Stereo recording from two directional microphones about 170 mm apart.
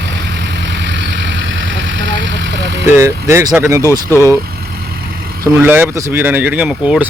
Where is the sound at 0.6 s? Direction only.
90° right.